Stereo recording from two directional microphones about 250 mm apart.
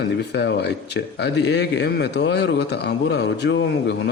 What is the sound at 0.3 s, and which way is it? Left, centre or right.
A man's voice, left.